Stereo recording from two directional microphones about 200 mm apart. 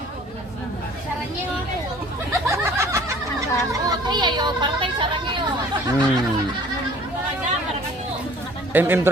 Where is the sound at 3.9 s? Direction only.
20° right (ahead or behind).